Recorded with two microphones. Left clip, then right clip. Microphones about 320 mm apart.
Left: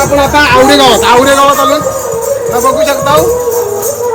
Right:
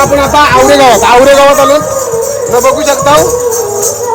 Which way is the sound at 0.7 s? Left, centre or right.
Centre.